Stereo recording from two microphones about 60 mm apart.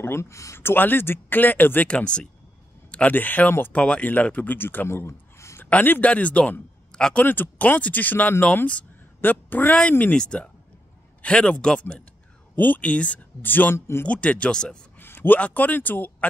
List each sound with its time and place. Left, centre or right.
0.0 s speech: left
0.6 s speech: left
1.9 s a man's voice: centre
3.7 s a man's voice: centre; by 5.6 s left
5.7 s speech: left
6.9 s a sound: centre
7.2 s a man's voice: left
12.5 s speech: left
13.4 s speech: left
13.7 s speech: left
14.0 s speech: left
15.0 s speech: left